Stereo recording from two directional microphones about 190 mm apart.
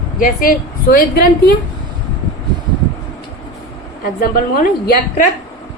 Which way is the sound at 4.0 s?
50° left (ahead or behind).